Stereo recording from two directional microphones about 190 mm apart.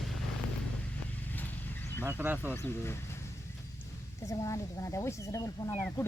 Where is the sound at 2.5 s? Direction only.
10° left (ahead or behind).